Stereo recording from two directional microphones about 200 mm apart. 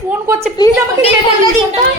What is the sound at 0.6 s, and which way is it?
Speech, 20° left (ahead or behind).